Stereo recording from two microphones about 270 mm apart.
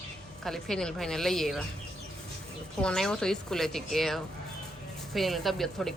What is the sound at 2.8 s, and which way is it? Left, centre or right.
A woman's voice, centre.